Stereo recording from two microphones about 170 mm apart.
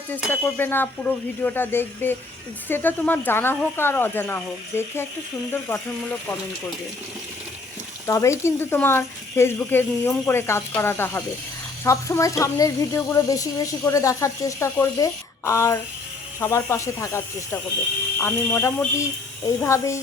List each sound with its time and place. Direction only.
0.1 s speech: 10° left (ahead or behind)
8.0 s speech: 15° left (ahead or behind)